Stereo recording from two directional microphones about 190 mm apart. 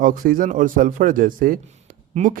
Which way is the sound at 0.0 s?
45° right (ahead or behind).